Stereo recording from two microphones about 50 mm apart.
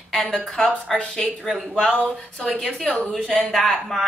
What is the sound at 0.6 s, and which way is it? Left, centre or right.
Speech, centre.